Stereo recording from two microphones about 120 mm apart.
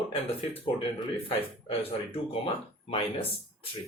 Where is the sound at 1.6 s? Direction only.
50° left (ahead or behind).